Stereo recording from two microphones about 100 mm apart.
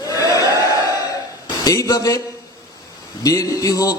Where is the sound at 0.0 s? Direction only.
35° left (ahead or behind).